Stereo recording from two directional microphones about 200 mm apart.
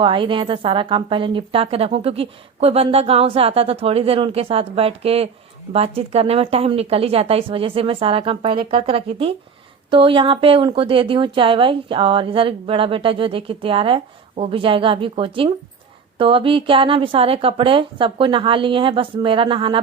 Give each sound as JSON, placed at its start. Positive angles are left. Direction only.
{"t": 0.0, "sound": "a woman's voice", "side_deg": -25}